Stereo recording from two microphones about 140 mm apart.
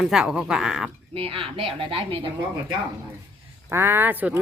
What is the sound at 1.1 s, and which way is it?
Speech, 40° right (ahead or behind).